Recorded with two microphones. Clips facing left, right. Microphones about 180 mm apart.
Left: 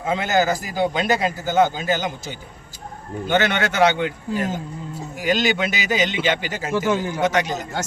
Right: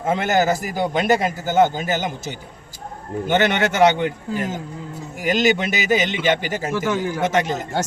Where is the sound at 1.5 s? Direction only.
50° right (ahead or behind).